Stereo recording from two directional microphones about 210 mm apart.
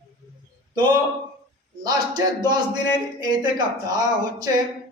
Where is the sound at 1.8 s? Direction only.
15° right (ahead or behind).